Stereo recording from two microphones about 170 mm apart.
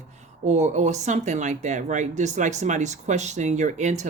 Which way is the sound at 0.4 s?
40° right (ahead or behind).